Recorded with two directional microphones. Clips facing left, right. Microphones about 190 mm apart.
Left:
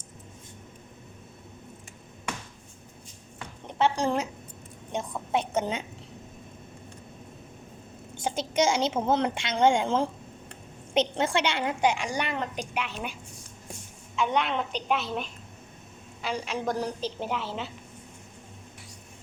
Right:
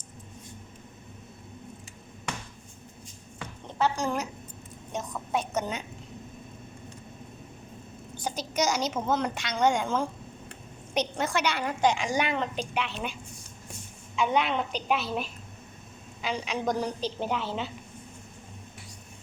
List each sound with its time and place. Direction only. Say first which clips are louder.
3.7 s a woman's voice: left 2 dB; 25° left (ahead or behind)
8.2 s a woman's voice: left 3 dB; 25° left (ahead or behind)
11.8 s a woman's voice: right 3 dB; 5° left (ahead or behind)
14.2 s a woman's voice: right 1 dB; centre (ahead or behind)